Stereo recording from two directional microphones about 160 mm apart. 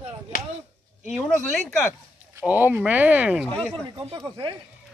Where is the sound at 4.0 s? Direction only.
30° right (ahead or behind).